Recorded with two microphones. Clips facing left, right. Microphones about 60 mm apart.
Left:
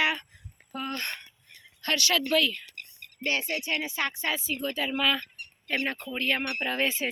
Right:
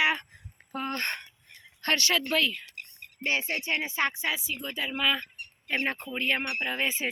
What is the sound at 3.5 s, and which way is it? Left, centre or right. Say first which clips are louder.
Speech: even; right.